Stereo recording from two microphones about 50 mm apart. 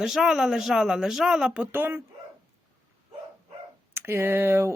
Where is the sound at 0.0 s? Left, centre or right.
Centre.